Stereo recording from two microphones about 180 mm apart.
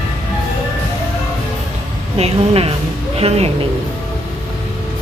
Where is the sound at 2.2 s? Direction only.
35° right (ahead or behind).